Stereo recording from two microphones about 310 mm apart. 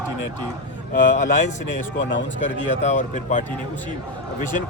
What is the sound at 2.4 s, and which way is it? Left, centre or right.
Speech, left.